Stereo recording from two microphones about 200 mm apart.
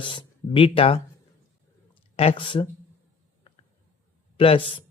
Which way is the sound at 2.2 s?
25° left (ahead or behind).